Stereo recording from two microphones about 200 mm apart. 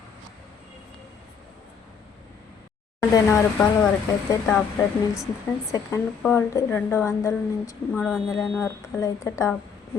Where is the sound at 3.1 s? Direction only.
10° left (ahead or behind).